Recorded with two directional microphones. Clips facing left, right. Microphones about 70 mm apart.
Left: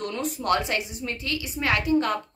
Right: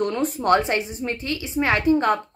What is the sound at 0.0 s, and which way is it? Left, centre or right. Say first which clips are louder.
Speech: right 7 dB; right.